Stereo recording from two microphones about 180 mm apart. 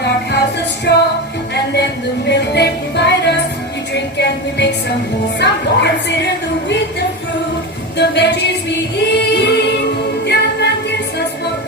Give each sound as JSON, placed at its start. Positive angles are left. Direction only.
{"t": 0.9, "sound": "music", "side_deg": 70}
{"t": 7.9, "sound": "a sound", "side_deg": 70}
{"t": 9.0, "sound": "singing", "side_deg": 70}
{"t": 10.2, "sound": "music", "side_deg": 70}